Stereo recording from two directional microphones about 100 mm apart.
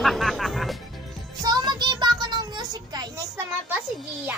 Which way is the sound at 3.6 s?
20° right (ahead or behind).